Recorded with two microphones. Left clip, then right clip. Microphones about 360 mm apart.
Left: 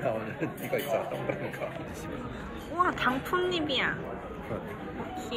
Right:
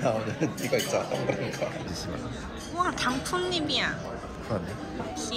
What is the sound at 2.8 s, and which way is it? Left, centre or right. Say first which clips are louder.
Speech: left 1 dB; centre.